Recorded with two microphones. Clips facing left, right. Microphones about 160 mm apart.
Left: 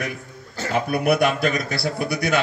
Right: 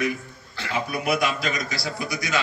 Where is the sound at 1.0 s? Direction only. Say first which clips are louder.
Left 6 dB; 60° left (ahead or behind).